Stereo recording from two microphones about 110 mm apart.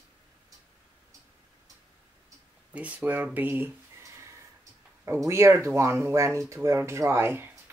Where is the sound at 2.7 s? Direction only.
15° right (ahead or behind).